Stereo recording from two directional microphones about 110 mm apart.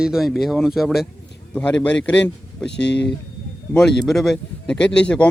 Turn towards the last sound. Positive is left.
turn(degrees=10)  # may be behind; listen again after turning